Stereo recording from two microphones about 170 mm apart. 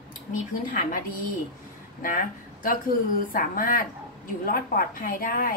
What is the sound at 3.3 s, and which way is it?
A woman's voice, 55° left (ahead or behind).